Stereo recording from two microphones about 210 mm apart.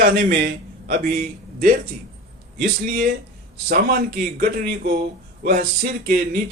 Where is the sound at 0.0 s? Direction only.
45° right (ahead or behind).